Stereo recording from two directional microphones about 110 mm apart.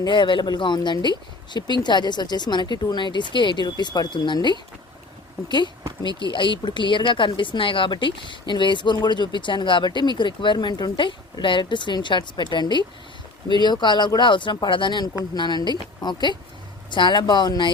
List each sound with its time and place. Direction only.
0.0 s a woman's voice: 45° left (ahead or behind)